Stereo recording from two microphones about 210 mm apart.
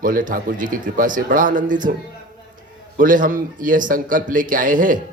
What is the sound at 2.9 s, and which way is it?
Speech, 40° right (ahead or behind).